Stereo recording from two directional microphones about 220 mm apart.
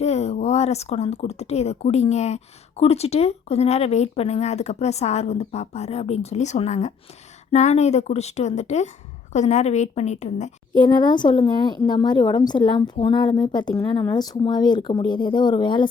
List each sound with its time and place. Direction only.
0.0 s a woman's voice: 30° left (ahead or behind)
10.8 s speech: 20° left (ahead or behind)